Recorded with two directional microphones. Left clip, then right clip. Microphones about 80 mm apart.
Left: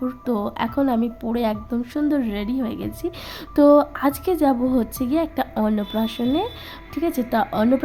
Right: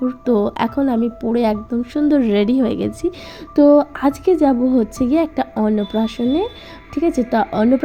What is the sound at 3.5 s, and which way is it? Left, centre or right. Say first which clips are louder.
Speech: right 3 dB; centre.